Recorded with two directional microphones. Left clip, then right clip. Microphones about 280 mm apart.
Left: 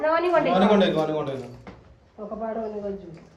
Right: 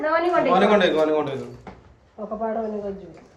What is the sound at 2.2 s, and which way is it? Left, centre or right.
Speech, right.